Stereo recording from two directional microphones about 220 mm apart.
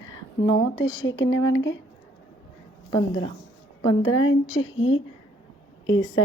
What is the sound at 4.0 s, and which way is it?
Speech, 65° left (ahead or behind).